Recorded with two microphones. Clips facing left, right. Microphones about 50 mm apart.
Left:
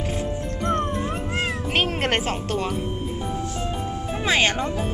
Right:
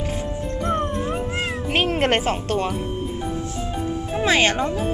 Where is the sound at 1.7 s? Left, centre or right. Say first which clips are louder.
Right 4 dB; right.